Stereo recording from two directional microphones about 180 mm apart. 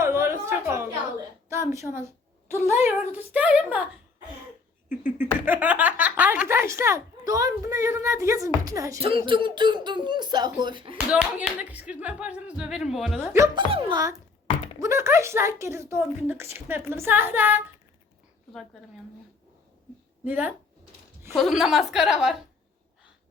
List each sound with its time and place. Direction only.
0.0 s a sound: 15° right (ahead or behind)
1.5 s a woman's voice: 15° right (ahead or behind)
5.2 s speech: 10° right (ahead or behind); by 10.9 s 25° right (ahead or behind)
10.9 s speech: 5° right (ahead or behind)
13.7 s speech: 30° right (ahead or behind); by 17.6 s 10° right (ahead or behind)
20.2 s a woman's voice: 10° right (ahead or behind)